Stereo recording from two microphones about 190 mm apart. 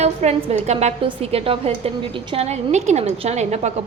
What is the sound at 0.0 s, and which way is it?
A woman's voice, 35° right (ahead or behind).